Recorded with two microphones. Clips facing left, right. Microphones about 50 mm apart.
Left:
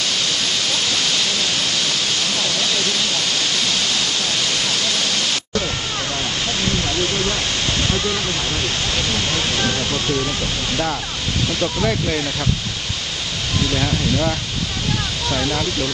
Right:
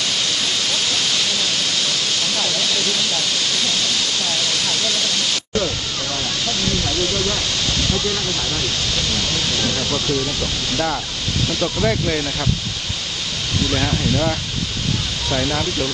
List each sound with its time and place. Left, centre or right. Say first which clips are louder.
8.9 s speech: left 1 dB; left
11.6 s speech: right 1 dB; centre
13.7 s speech: right 1 dB; centre